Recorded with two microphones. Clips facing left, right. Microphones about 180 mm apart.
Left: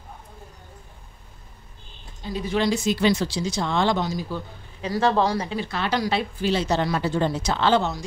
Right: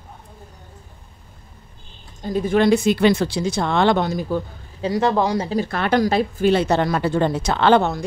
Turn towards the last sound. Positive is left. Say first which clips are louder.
# right 5 dB
turn(degrees=-55)  # may be behind; listen again after turning